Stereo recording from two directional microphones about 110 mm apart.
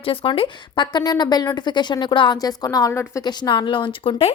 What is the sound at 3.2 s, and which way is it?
A woman's voice, 40° left (ahead or behind).